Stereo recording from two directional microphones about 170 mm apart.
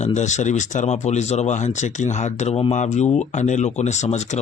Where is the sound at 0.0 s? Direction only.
45° left (ahead or behind).